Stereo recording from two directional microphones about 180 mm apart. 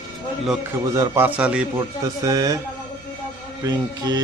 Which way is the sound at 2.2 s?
20° right (ahead or behind).